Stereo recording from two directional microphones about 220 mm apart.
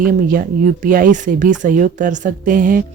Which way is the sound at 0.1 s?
40° right (ahead or behind).